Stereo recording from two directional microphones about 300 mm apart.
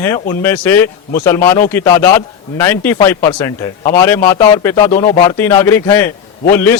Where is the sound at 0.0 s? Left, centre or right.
Centre.